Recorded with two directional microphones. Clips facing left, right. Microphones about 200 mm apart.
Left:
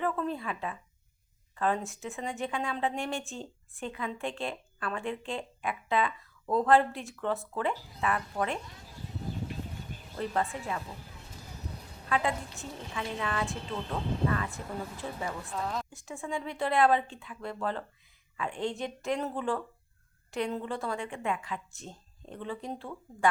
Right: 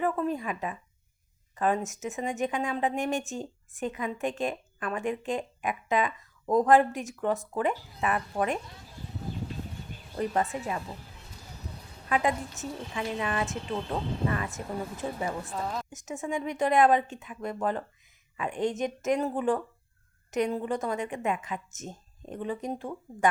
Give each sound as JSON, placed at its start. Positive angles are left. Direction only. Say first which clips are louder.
{"t": 0.0, "sound": "a woman's voice", "louder": "right 3 dB", "side_deg": -10}
{"t": 10.2, "sound": "speech", "louder": "right 3 dB", "side_deg": -20}
{"t": 12.0, "sound": "a woman's voice", "louder": "right 3 dB", "side_deg": -15}
{"t": 15.4, "sound": "a woman's voice", "louder": "right 1 dB", "side_deg": -5}
{"t": 15.9, "sound": "a woman's voice", "louder": "right 4 dB", "side_deg": -20}